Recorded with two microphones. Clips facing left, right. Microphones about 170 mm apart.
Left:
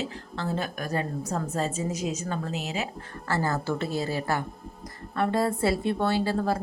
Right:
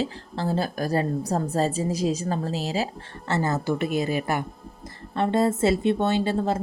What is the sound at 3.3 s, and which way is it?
A woman's voice, 20° right (ahead or behind).